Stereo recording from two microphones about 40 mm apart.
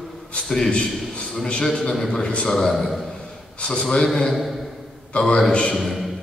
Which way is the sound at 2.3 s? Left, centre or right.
Left.